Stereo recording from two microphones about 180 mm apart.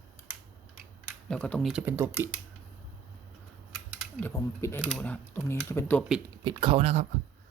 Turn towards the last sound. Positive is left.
turn(degrees=-35)  # may be behind; listen again after turning